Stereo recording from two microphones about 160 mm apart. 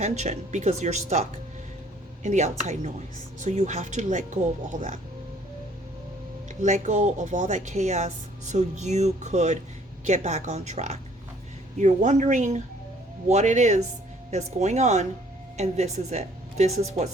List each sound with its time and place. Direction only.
0.0 s speech: 45° right (ahead or behind)
2.2 s speech: 45° right (ahead or behind)
6.5 s speech: 50° right (ahead or behind)